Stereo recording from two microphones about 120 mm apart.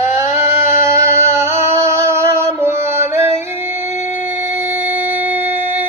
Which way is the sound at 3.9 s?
75° left (ahead or behind).